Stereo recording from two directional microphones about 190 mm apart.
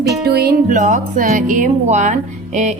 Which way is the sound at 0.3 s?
55° right (ahead or behind).